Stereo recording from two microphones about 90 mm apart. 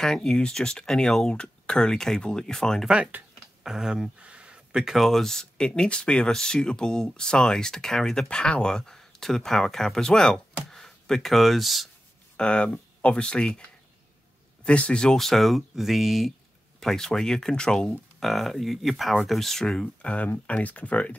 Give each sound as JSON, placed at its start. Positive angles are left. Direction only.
{"t": 0.0, "sound": "speech", "side_deg": 5}
{"t": 2.9, "sound": "speech", "side_deg": -15}
{"t": 3.6, "sound": "speech", "side_deg": -5}
{"t": 12.4, "sound": "speech", "side_deg": 10}